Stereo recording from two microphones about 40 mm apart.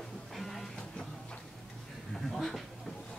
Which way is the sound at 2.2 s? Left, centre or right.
Centre.